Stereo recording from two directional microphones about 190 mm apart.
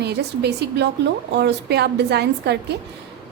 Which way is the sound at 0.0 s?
60° right (ahead or behind).